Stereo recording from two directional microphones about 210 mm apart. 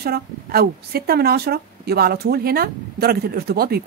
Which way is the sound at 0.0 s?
45° right (ahead or behind).